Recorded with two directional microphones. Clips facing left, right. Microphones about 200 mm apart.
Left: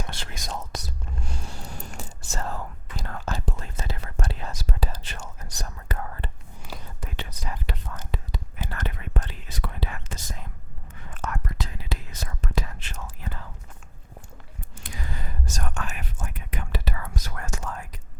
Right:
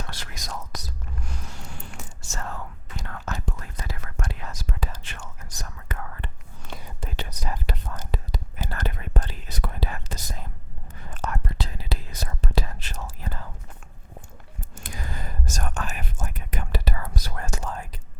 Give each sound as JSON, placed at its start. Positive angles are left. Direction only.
{"t": 0.0, "sound": "whispering", "side_deg": 25}
{"t": 6.7, "sound": "whispering", "side_deg": 5}
{"t": 7.0, "sound": "whispering", "side_deg": -35}
{"t": 14.8, "sound": "whispering", "side_deg": -45}